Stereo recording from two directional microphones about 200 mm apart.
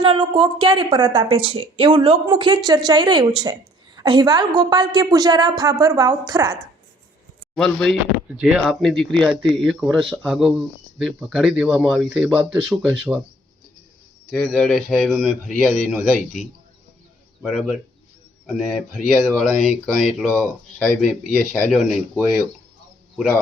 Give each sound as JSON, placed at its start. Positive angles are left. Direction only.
{"t": 0.0, "sound": "a woman's voice", "side_deg": -25}
{"t": 7.5, "sound": "speech", "side_deg": 5}
{"t": 14.3, "sound": "speech", "side_deg": 5}
{"t": 17.4, "sound": "speech", "side_deg": 0}